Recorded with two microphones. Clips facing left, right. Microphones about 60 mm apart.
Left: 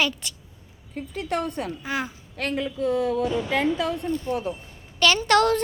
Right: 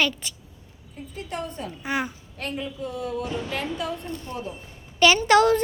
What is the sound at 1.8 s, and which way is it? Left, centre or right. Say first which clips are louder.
Speech: right 6 dB; centre.